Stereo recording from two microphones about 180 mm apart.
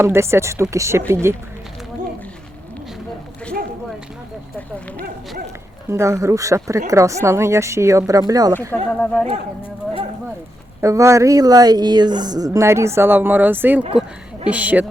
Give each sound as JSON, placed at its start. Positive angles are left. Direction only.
{"t": 0.0, "sound": "speech", "side_deg": -15}
{"t": 5.9, "sound": "speech", "side_deg": -15}
{"t": 8.7, "sound": "speech", "side_deg": 10}
{"t": 10.8, "sound": "speech", "side_deg": -15}